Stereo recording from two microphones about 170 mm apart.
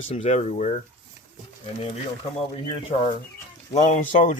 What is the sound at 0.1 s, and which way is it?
Speech, 40° left (ahead or behind).